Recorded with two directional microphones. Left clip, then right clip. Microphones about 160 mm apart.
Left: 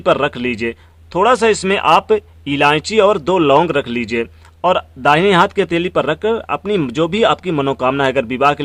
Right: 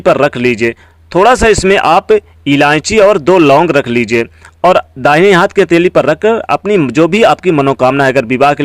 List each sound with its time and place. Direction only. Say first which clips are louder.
0.0 s speech: right 6 dB; 35° right (ahead or behind)